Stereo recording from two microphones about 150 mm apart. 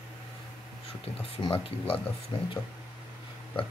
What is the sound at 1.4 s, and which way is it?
Speech, 35° left (ahead or behind).